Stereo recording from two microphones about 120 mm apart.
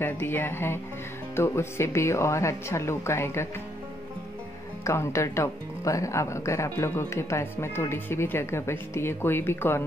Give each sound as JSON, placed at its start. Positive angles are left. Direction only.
{"t": 0.0, "sound": "speech", "side_deg": 15}
{"t": 4.8, "sound": "speech", "side_deg": 25}